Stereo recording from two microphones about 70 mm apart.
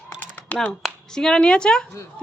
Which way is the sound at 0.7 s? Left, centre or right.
Centre.